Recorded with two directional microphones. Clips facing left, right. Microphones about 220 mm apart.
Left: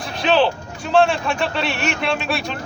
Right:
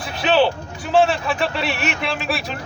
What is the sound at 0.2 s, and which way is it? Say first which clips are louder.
Music: even; 5° right (ahead or behind).